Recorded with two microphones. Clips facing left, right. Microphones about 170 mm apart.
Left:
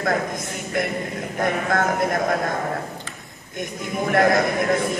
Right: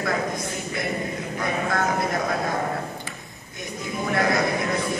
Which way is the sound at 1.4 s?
50° left (ahead or behind).